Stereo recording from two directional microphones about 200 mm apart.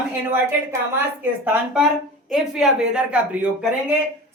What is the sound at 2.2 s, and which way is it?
A woman's voice, 5° right (ahead or behind).